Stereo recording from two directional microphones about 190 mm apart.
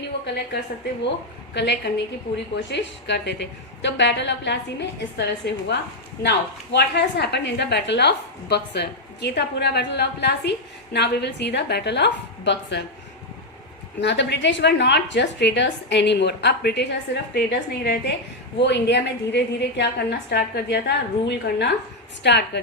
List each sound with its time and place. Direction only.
1.5 s a woman's voice: 65° left (ahead or behind)
14.0 s a woman's voice: 65° left (ahead or behind)